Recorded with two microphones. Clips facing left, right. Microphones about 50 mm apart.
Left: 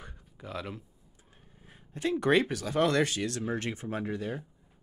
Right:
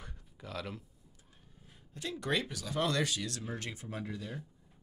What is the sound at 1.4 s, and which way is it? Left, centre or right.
Speech, left.